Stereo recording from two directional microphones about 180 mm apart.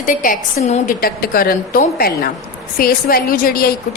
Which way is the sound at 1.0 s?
55° left (ahead or behind).